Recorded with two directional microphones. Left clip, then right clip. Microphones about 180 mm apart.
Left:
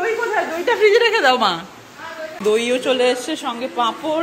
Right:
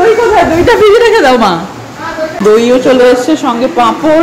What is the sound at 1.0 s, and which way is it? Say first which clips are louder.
Speech: right 9 dB; 5° right (ahead or behind).